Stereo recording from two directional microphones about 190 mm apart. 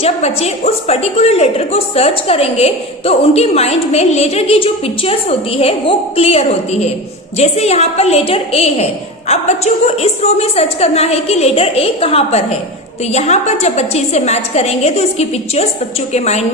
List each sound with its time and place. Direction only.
0.0 s a woman's voice: 35° left (ahead or behind)